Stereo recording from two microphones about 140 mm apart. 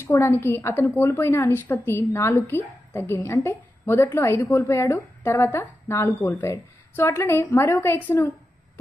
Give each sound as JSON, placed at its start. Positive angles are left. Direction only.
{"t": 0.0, "sound": "a woman's voice", "side_deg": 15}